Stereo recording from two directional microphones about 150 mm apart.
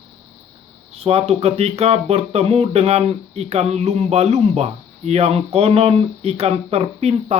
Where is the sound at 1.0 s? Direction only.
40° right (ahead or behind).